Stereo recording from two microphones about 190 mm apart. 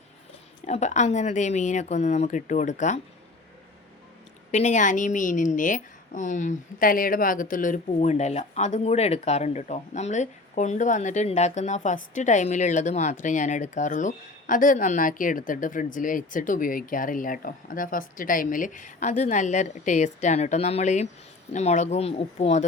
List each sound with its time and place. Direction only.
0.6 s a woman's voice: 35° left (ahead or behind)
4.5 s a woman's voice: 40° left (ahead or behind)